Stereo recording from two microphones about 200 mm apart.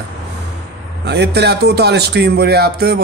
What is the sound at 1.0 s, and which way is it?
Speech, 55° right (ahead or behind).